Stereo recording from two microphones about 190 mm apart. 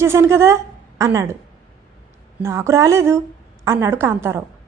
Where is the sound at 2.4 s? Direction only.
15° right (ahead or behind).